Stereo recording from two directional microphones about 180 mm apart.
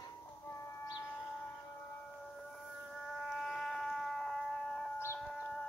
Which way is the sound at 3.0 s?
5° left (ahead or behind).